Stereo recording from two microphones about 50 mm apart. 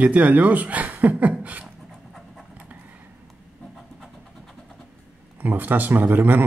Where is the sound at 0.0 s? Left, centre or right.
Right.